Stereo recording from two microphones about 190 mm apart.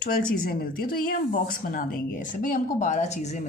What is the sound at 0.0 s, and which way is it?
Speech, 45° left (ahead or behind).